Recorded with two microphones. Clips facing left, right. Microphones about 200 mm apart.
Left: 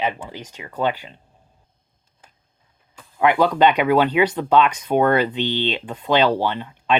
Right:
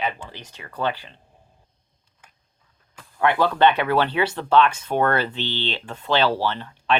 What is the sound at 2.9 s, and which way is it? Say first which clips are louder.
Speech: left 3 dB; 15° left (ahead or behind).